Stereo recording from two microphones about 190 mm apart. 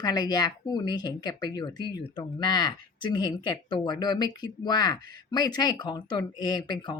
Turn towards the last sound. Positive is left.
turn(degrees=25)  # may be behind; listen again after turning